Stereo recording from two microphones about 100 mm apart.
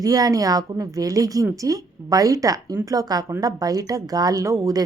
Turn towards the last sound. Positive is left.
turn(degrees=-35)  # may be behind; listen again after turning